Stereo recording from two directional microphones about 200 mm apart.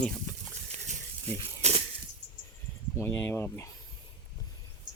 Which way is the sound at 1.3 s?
30° right (ahead or behind).